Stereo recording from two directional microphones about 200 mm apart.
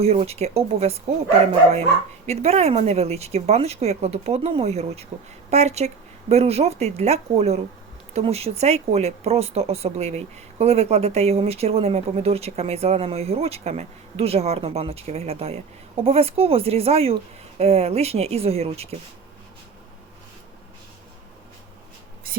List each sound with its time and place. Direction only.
0.0 s speech: 30° right (ahead or behind)
2.2 s speech: 30° right (ahead or behind)